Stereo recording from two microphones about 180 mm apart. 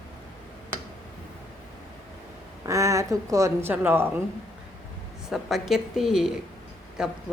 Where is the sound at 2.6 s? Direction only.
15° right (ahead or behind).